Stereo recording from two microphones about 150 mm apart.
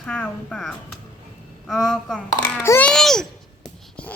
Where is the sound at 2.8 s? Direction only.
5° left (ahead or behind).